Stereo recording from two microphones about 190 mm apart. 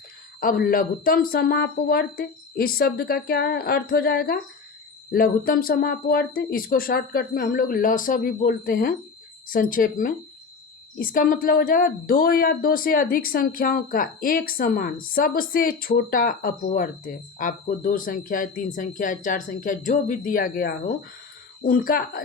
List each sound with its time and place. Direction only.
0.3 s a woman's voice: 50° left (ahead or behind)